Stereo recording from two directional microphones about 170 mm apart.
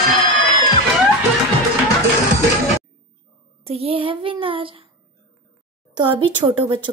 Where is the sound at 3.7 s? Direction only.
35° right (ahead or behind).